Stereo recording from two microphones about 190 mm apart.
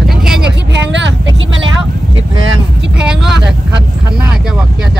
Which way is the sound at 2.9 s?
5° right (ahead or behind).